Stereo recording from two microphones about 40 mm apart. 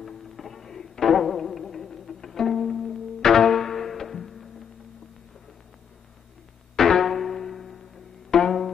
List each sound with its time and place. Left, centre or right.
0.0 s music: centre
6.8 s music: centre